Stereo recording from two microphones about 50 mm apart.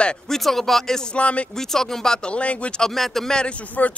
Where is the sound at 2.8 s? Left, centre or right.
Centre.